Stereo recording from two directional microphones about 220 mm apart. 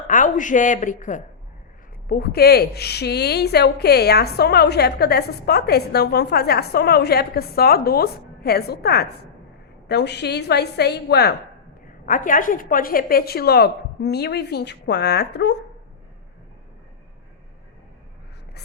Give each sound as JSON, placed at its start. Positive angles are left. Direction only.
{"t": 0.1, "sound": "a woman's voice", "side_deg": 35}
{"t": 11.9, "sound": "a woman's voice", "side_deg": 35}